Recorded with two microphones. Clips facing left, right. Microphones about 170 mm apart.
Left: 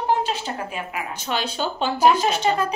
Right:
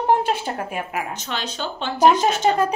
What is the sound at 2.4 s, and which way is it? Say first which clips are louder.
Speech: right 3 dB; 45° right (ahead or behind).